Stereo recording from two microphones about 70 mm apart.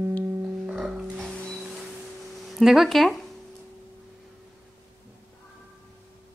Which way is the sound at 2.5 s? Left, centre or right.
Centre.